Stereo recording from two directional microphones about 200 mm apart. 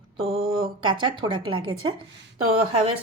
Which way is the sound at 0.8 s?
25° right (ahead or behind).